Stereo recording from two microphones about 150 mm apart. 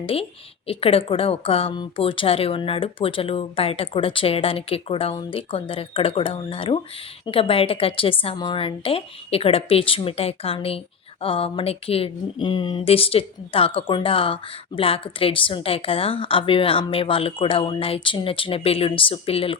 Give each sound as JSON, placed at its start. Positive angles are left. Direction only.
{"t": 0.0, "sound": "a woman's voice", "side_deg": 40}